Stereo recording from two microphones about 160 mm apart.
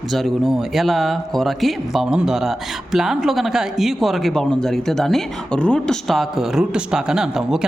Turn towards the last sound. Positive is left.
turn(degrees=-5)  # may be behind; listen again after turning